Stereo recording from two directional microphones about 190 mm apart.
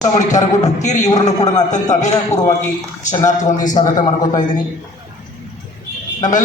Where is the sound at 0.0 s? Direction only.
40° left (ahead or behind).